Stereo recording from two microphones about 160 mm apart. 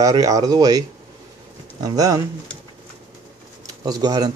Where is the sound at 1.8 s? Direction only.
20° right (ahead or behind).